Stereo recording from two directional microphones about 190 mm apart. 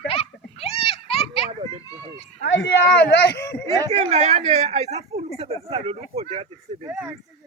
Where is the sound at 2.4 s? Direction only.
70° left (ahead or behind).